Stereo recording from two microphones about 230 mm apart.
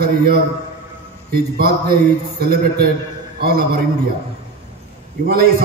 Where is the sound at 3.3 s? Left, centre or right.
Right.